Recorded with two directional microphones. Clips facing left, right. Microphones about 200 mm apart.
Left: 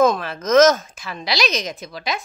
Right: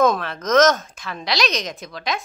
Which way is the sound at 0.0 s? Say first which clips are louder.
Left 1 dB; centre (ahead or behind).